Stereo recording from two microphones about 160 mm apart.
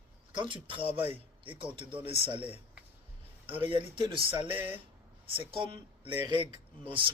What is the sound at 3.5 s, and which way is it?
A man's voice, 35° right (ahead or behind).